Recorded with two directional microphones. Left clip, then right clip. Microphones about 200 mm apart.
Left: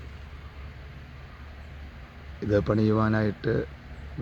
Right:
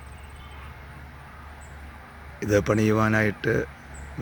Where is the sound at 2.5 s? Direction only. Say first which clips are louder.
Right 3 dB; 30° right (ahead or behind).